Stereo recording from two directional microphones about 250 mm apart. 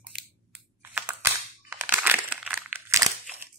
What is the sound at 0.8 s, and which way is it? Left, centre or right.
Crumpling, centre.